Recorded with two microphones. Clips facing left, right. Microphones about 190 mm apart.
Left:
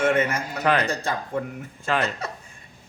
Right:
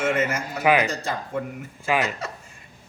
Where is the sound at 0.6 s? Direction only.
10° right (ahead or behind).